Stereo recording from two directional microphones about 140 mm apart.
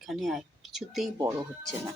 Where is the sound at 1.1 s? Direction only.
25° right (ahead or behind).